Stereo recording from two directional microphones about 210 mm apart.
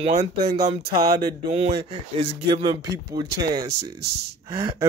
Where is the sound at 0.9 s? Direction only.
20° right (ahead or behind).